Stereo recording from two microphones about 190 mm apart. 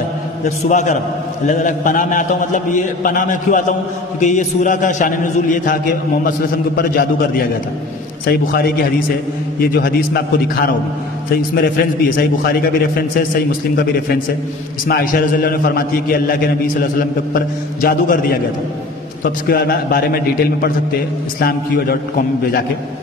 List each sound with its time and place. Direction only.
0.7 s a man's voice: 40° left (ahead or behind)
6.8 s a man's voice: 55° left (ahead or behind)
14.9 s a man's voice: 50° left (ahead or behind)
17.8 s a man's voice: 50° left (ahead or behind)
19.4 s a man's voice: 55° left (ahead or behind)
21.4 s a man's voice: 55° left (ahead or behind)